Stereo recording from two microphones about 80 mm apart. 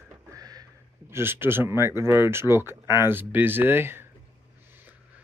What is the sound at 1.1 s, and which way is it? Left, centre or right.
Speech, right.